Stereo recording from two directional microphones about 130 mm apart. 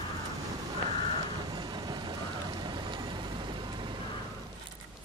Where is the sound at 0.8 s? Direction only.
60° right (ahead or behind).